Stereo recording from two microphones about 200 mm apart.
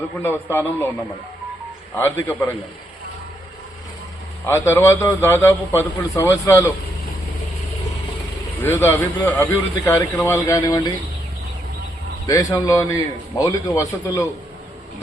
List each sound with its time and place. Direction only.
0.2 s a man's voice: 10° left (ahead or behind)
2.0 s a man's voice: 10° left (ahead or behind)
4.4 s a man's voice: 10° left (ahead or behind)
8.6 s a man's voice: 15° left (ahead or behind)
12.2 s a man's voice: 20° left (ahead or behind)